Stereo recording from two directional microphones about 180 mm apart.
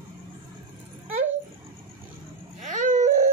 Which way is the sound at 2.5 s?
45° right (ahead or behind).